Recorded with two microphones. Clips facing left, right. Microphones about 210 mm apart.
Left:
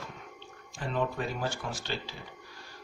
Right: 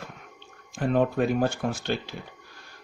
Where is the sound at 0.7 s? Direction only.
55° right (ahead or behind).